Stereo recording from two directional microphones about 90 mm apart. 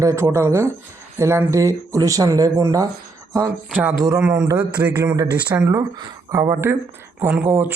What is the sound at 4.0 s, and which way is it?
Speech, 35° right (ahead or behind).